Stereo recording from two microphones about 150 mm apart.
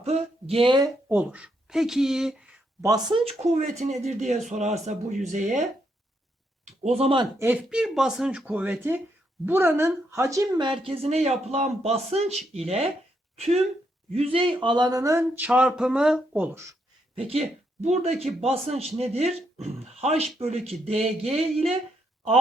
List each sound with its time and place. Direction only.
0.0 s speech: 45° right (ahead or behind)
1.0 s speech: 10° right (ahead or behind)
2.8 s speech: 25° right (ahead or behind)
3.2 s speech: 45° right (ahead or behind)
6.8 s speech: 45° right (ahead or behind)
7.3 s speech: 10° right (ahead or behind); by 12.9 s 40° right (ahead or behind)
14.1 s speech: 40° right (ahead or behind); by 15.2 s 25° right (ahead or behind)
15.2 s speech: 10° right (ahead or behind)
17.2 s speech: 40° right (ahead or behind)